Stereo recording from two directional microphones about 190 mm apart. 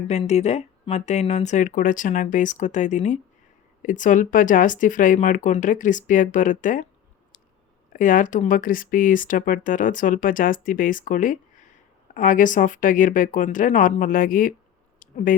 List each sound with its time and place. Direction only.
0.1 s speech: 35° left (ahead or behind)
7.9 s speech: 45° left (ahead or behind)
14.9 s a sound: 45° left (ahead or behind)